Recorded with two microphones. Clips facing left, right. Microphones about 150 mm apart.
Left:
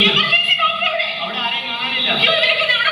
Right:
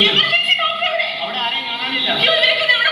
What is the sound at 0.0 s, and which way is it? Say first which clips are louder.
Music: even; 70° right (ahead or behind).